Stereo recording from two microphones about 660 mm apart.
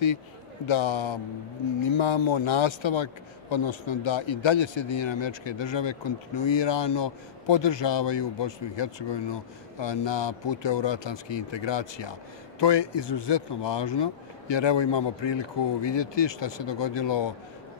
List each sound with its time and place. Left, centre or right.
0.7 s a man's voice: left